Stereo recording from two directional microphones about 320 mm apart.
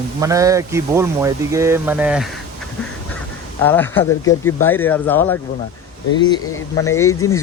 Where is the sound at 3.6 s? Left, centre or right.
Centre.